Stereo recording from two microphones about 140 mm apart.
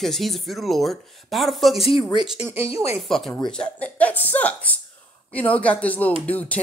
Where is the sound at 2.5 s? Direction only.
20° right (ahead or behind).